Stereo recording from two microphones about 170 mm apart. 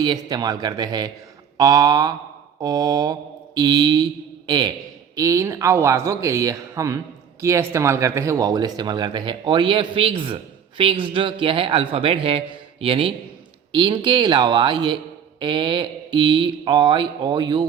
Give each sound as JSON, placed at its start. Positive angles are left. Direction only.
{"t": 0.0, "sound": "a man's voice", "side_deg": -25}